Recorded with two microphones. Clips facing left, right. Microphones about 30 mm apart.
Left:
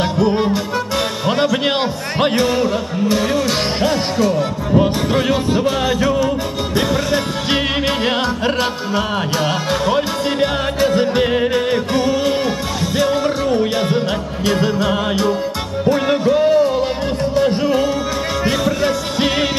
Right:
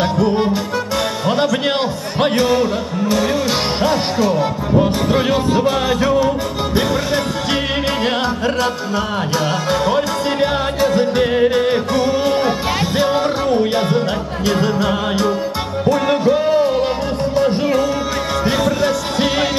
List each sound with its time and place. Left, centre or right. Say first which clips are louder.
0.0 s music: even; centre
3.8 s music: even; centre
9.7 s music: right 3 dB; centre
12.4 s music: right 2 dB; centre
13.5 s music: right 1 dB; centre
18.5 s music: right 1 dB; centre